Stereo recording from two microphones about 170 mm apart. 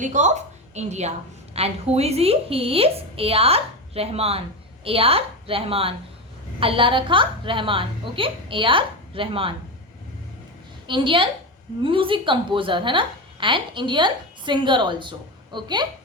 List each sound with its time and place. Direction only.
0.0 s a woman's voice: 45° right (ahead or behind)
10.8 s a woman's voice: 30° right (ahead or behind)